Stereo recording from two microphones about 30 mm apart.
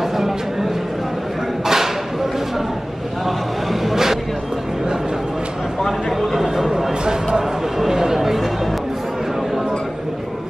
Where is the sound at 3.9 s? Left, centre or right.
Centre.